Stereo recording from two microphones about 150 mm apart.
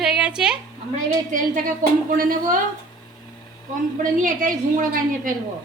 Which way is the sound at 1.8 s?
65° right (ahead or behind).